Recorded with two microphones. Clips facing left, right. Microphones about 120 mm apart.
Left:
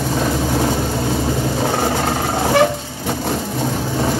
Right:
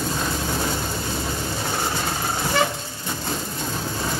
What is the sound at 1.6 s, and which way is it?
Vehicle, 80° left.